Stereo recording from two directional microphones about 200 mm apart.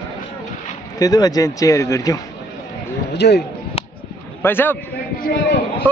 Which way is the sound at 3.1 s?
55° left (ahead or behind).